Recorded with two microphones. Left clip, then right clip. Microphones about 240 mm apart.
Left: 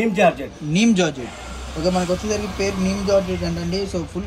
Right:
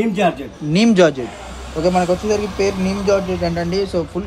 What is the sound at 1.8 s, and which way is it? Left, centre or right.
Speech, right.